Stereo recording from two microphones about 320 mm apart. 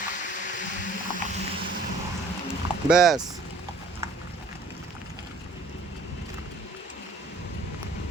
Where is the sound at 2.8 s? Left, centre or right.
Centre.